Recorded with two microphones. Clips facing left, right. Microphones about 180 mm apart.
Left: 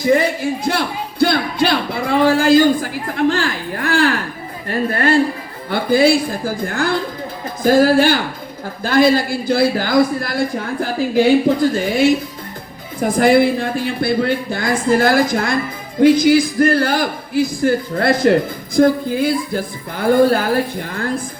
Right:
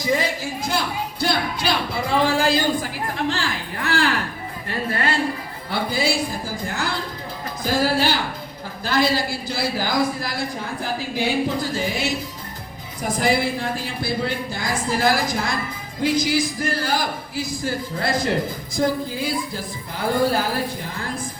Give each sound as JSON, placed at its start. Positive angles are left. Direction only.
{"t": 0.0, "sound": "a woman's voice", "side_deg": 60}
{"t": 11.4, "sound": "a woman's voice", "side_deg": 55}